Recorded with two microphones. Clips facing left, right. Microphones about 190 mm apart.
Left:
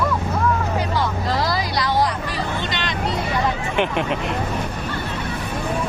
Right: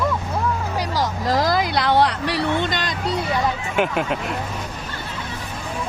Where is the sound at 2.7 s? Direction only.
40° right (ahead or behind).